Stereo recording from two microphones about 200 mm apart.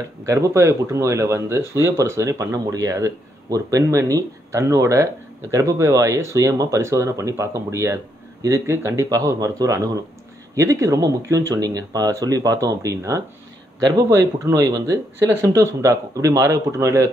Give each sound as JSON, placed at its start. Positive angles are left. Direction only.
{"t": 0.2, "sound": "speech", "side_deg": -15}